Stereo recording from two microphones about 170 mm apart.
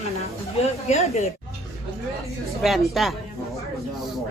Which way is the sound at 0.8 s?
40° left (ahead or behind).